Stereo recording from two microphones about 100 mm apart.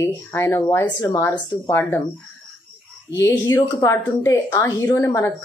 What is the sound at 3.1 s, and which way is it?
A woman's voice, 30° left (ahead or behind).